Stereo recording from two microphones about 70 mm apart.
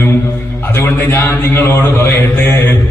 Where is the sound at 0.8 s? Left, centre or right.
Left.